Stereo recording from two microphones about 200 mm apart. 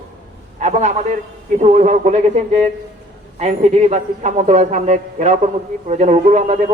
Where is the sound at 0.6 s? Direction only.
35° right (ahead or behind).